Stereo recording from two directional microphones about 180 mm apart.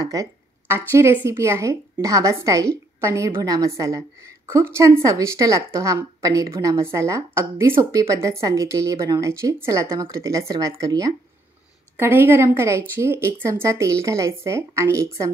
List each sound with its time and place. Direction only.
0.0 s a woman's voice: 20° right (ahead or behind)